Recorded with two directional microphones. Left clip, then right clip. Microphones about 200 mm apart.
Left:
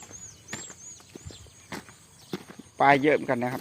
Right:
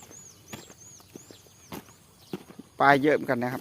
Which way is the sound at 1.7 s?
10° left (ahead or behind).